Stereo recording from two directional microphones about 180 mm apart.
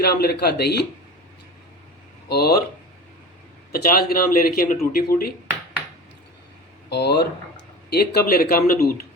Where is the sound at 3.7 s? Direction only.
55° left (ahead or behind).